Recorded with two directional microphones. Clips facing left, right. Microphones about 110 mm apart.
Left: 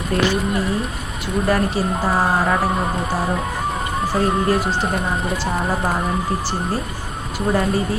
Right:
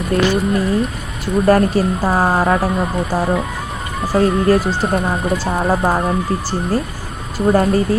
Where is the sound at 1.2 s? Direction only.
45° right (ahead or behind).